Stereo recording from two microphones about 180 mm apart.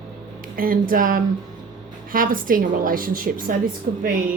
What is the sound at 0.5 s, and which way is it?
A woman's voice, 50° right (ahead or behind).